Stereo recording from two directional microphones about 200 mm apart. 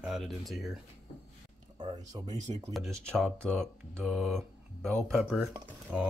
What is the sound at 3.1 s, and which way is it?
Speech, 5° left (ahead or behind).